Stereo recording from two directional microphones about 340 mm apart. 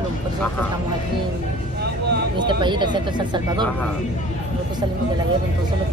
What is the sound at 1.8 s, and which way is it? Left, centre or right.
Vehicle, right.